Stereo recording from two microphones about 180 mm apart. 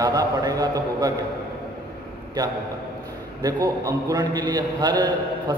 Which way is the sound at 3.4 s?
20° right (ahead or behind).